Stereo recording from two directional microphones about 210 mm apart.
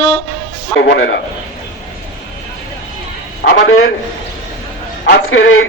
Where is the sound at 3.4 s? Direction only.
70° left (ahead or behind).